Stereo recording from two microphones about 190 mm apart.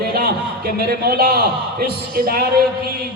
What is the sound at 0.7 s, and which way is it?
A man's voice, 55° right (ahead or behind).